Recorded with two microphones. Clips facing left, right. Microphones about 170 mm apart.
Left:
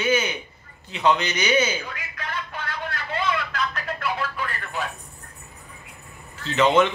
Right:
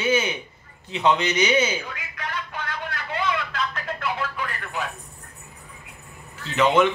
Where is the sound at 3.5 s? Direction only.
25° right (ahead or behind).